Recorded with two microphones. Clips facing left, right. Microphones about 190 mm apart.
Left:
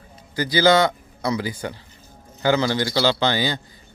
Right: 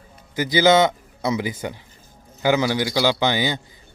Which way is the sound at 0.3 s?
20° right (ahead or behind).